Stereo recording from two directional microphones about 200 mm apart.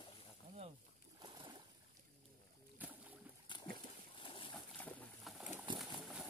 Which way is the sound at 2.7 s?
10° right (ahead or behind).